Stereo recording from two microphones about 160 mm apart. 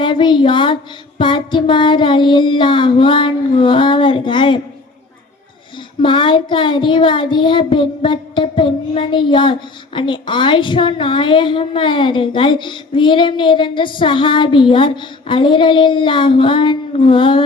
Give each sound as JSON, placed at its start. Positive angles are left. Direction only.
{"t": 0.0, "sound": "child singing", "side_deg": 30}
{"t": 6.0, "sound": "child singing", "side_deg": 30}